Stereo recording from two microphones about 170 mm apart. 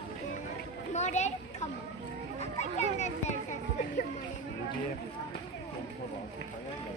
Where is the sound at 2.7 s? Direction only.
40° left (ahead or behind).